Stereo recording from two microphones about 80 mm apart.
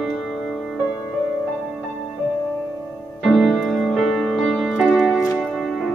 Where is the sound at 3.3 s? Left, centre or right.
Centre.